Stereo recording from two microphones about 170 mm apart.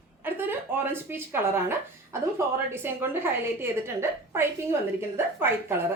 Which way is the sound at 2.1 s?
15° right (ahead or behind).